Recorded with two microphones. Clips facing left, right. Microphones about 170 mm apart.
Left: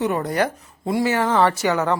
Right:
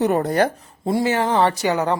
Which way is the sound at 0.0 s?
40° right (ahead or behind).